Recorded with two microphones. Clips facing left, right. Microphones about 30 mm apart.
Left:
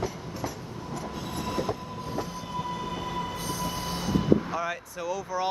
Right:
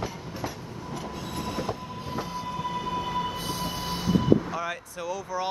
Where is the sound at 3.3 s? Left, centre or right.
Right.